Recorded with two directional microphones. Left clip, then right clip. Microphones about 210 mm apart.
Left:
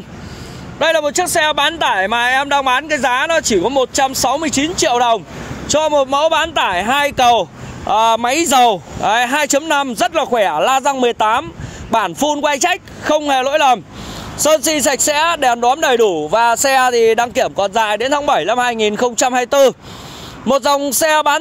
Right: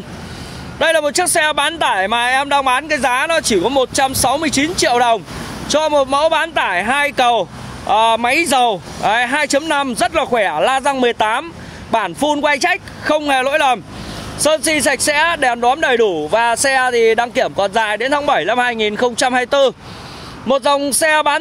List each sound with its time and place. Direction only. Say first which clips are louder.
0.7 s speech: even; 10° right (ahead or behind); by 21.4 s 20° left (ahead or behind)